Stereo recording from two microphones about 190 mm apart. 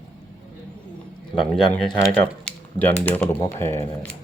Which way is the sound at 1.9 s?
25° left (ahead or behind).